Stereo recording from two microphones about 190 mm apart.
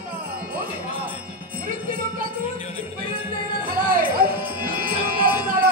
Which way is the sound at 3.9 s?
50° right (ahead or behind).